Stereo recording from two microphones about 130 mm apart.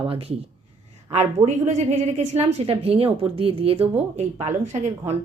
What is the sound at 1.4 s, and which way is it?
A woman's voice, 60° right (ahead or behind).